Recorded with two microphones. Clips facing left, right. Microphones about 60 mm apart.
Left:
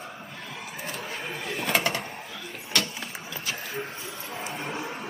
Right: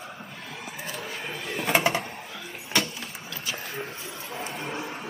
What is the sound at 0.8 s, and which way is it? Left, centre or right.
Vehicle, left.